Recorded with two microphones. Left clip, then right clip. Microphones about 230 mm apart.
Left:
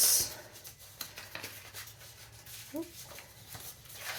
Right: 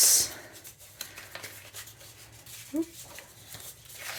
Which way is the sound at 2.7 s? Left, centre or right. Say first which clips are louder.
Right 8 dB; right.